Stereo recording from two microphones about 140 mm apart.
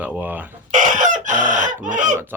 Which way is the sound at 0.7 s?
65° right (ahead or behind).